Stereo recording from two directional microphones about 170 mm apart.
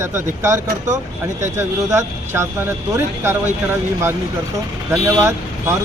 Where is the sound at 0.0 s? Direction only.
15° right (ahead or behind).